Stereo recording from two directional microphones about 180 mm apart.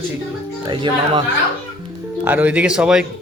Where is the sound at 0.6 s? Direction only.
25° right (ahead or behind).